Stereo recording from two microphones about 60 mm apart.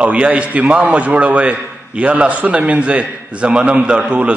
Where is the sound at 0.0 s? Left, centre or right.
Right.